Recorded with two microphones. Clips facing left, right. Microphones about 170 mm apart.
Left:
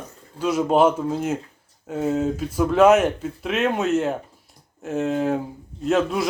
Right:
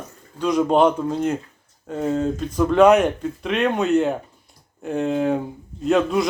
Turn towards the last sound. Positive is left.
turn(degrees=0)  # may be behind; listen again after turning